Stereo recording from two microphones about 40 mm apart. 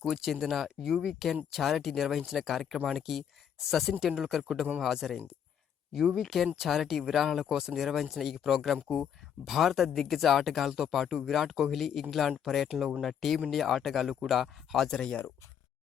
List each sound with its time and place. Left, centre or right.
0.0 s speech: centre
6.2 s speech: centre
14.8 s speech: centre